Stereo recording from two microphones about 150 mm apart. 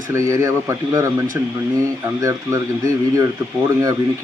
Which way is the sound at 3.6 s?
20° right (ahead or behind).